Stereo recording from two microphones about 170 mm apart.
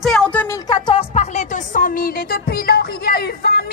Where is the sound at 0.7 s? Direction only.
25° left (ahead or behind); by 3.6 s 60° left (ahead or behind).